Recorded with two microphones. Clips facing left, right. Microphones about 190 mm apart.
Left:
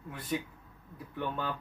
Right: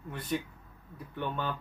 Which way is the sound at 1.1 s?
5° left (ahead or behind).